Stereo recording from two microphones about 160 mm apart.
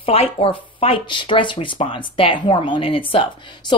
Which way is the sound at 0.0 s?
35° left (ahead or behind).